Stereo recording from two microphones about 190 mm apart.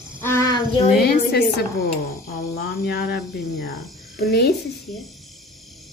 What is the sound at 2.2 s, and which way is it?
Cricket, 55° left (ahead or behind).